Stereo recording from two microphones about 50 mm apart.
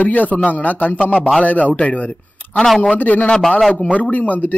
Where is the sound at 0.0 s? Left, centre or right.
Left.